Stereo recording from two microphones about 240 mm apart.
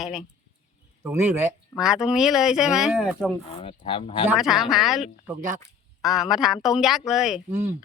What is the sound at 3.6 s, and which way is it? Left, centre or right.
Speech, left.